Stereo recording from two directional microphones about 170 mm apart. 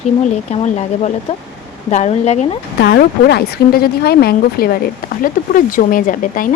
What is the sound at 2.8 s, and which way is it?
A woman's voice, 75° left (ahead or behind).